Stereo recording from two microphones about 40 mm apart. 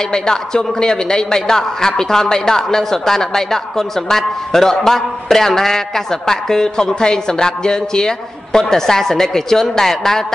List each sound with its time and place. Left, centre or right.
0.1 s a man's voice: centre